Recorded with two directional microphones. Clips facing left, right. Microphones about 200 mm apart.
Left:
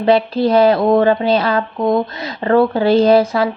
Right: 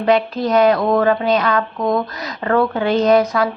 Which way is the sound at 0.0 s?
30° left (ahead or behind).